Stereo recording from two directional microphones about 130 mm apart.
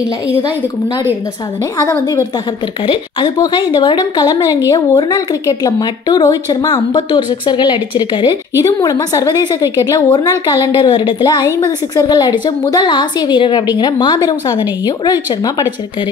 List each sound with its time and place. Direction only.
1.8 s a woman's voice: 25° left (ahead or behind)
2.9 s a woman's voice: 40° left (ahead or behind)